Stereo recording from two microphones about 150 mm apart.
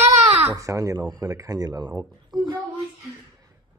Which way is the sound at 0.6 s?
20° right (ahead or behind).